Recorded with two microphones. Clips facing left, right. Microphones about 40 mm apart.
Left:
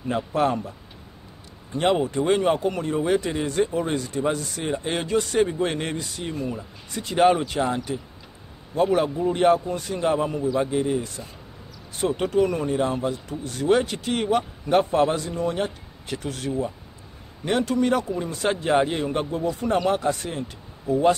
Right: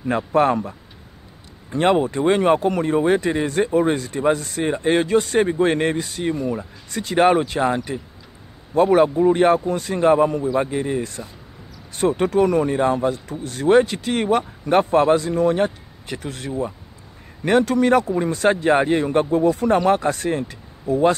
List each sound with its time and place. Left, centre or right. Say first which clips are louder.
1.7 s speech: right 4 dB; right
2.8 s speech: right 5 dB; right
6.5 s speech: right 6 dB; right
10.4 s a man's voice: right 3 dB; right
10.7 s speech: right 1 dB; right
12.2 s speech: right 4 dB; right
13.8 s speech: right 4 dB; right
17.5 s speech: right 6 dB; right
19.9 s speech: right 5 dB; right